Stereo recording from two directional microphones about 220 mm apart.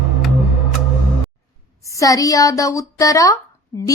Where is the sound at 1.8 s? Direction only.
15° left (ahead or behind).